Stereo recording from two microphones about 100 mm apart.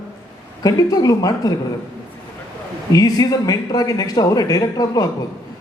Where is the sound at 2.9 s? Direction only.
35° left (ahead or behind).